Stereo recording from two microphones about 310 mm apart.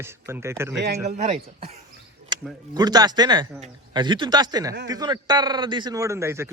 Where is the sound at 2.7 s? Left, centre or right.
Centre.